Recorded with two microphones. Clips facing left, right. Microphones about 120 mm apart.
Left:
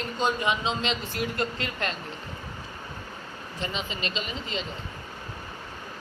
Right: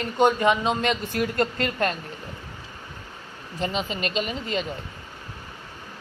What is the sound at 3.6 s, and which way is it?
Speech, 45° right (ahead or behind).